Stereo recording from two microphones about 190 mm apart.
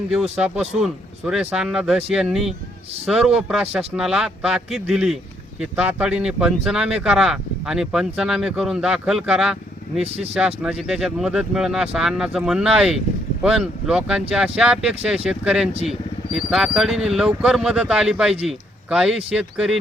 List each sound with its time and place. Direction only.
0.1 s a man's voice: 5° right (ahead or behind)
10.0 s speech: 35° right (ahead or behind)
10.3 s a man's voice: 5° right (ahead or behind)